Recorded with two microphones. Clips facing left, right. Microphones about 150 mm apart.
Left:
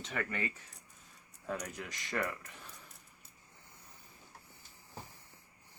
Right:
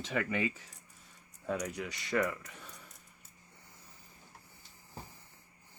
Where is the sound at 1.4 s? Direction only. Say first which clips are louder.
Right 4 dB; 90° right.